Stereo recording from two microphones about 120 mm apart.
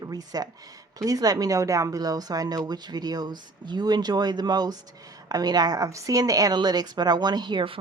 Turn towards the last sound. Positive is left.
turn(degrees=-40)  # may be behind; listen again after turning